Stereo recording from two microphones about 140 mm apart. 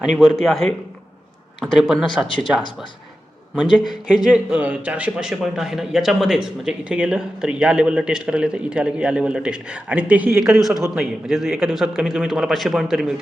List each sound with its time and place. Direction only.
0.0 s a man's voice: 5° right (ahead or behind)
2.2 s speech: 35° left (ahead or behind)
4.3 s a man's voice: 10° right (ahead or behind)